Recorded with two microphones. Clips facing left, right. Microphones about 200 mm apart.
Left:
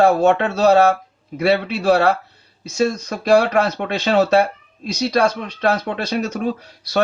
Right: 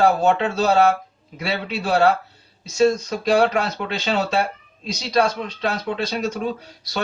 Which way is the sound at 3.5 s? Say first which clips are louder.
Left 5 dB; 55° left (ahead or behind).